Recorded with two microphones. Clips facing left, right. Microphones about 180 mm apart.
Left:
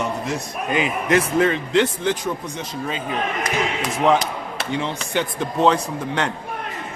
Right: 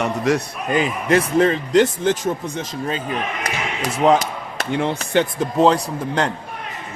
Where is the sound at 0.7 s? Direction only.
35° right (ahead or behind).